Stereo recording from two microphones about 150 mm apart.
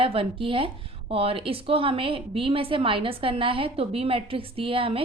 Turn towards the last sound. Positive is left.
turn(degrees=-35)  # may be behind; listen again after turning